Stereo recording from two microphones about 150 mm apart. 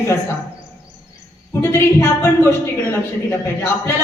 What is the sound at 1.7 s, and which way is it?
A man's voice, 15° left (ahead or behind).